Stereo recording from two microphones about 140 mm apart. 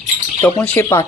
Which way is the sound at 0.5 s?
10° left (ahead or behind).